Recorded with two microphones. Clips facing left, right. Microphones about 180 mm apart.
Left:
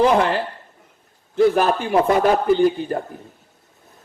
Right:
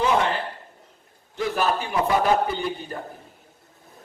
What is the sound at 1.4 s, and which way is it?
A man's voice, 40° left (ahead or behind).